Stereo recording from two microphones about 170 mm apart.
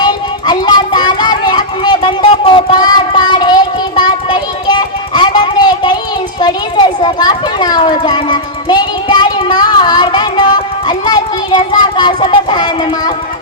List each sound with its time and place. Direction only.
0.0 s music: 25° left (ahead or behind)
2.3 s child singing: 35° left (ahead or behind)
6.4 s children playing: 25° left (ahead or behind)